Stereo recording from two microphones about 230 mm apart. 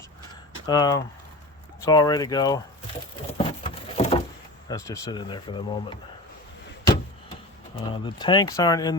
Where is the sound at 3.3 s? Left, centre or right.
Left.